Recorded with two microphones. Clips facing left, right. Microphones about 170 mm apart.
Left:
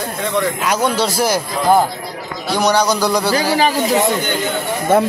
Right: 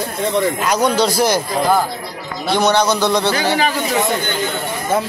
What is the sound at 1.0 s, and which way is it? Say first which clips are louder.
Speech: right 1 dB; 5° left (ahead or behind).